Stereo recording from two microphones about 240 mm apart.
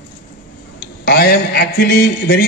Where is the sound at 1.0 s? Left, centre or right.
Left.